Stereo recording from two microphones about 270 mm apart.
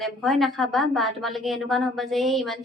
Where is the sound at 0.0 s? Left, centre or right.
Centre.